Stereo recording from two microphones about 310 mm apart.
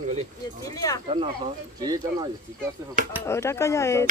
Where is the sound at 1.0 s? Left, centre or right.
Centre.